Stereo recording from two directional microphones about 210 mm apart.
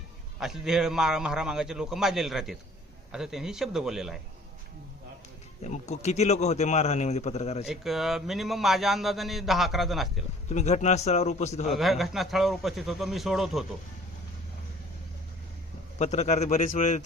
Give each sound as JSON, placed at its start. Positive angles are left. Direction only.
{"t": 0.3, "sound": "speech", "side_deg": 0}
{"t": 5.6, "sound": "a man's voice", "side_deg": 30}
{"t": 7.7, "sound": "speech", "side_deg": 0}
{"t": 10.5, "sound": "a man's voice", "side_deg": 35}
{"t": 11.6, "sound": "speech", "side_deg": 0}
{"t": 16.0, "sound": "a man's voice", "side_deg": 35}